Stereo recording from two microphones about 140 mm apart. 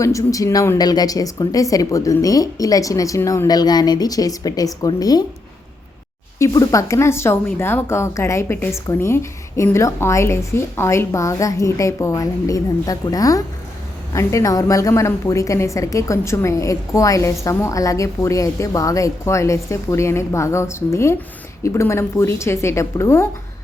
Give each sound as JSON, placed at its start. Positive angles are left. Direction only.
{"t": 0.0, "sound": "a woman's voice", "side_deg": 20}
{"t": 6.4, "sound": "a woman's voice", "side_deg": 25}